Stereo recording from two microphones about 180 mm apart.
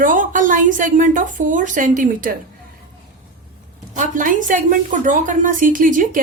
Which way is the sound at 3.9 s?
45° right (ahead or behind).